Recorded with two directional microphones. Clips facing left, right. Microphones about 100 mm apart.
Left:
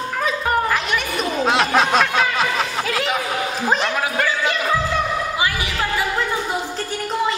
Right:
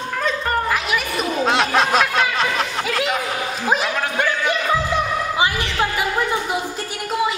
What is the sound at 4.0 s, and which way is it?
Speech, 5° left (ahead or behind).